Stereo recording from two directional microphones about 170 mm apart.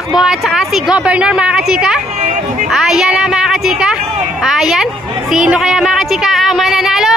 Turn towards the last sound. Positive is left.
turn(degrees=0)  # may be behind; listen again after turning